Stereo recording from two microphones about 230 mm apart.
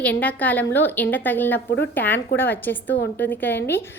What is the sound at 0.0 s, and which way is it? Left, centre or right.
A woman's voice, centre.